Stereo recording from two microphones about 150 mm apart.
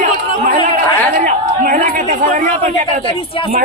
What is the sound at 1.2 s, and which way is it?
Chatter, 60° right (ahead or behind).